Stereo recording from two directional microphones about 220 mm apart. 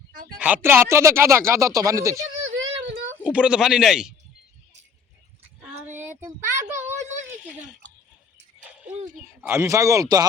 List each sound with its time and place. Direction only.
0.3 s speech: 5° right (ahead or behind)
2.5 s child singing: 60° right (ahead or behind)
3.2 s a man's voice: 5° right (ahead or behind)
5.6 s child singing: 10° right (ahead or behind)
9.5 s speech: 15° right (ahead or behind)